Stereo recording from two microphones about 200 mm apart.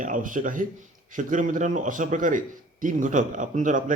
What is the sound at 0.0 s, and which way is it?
Speech, 40° right (ahead or behind).